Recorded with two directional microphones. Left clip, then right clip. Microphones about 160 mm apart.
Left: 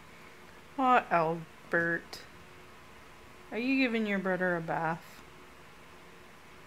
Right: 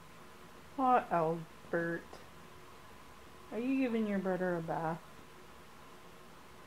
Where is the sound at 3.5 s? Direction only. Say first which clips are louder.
Left 5 dB; 10° left (ahead or behind).